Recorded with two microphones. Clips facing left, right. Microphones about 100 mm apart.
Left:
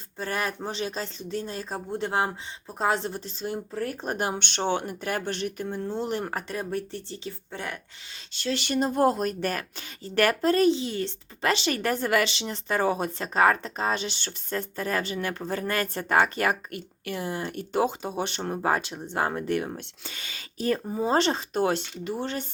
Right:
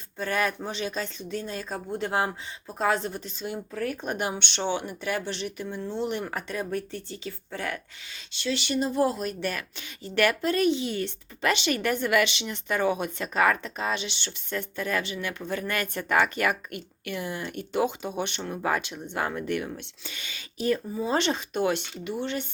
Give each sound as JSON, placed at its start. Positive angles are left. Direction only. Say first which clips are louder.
{"t": 0.2, "sound": "speech", "louder": "right 2 dB", "side_deg": 30}
{"t": 8.3, "sound": "speech", "louder": "even", "side_deg": 45}